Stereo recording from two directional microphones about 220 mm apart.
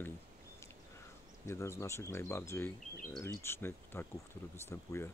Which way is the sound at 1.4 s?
10° left (ahead or behind).